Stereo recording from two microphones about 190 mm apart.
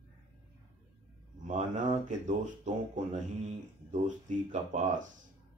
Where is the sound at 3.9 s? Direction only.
40° right (ahead or behind).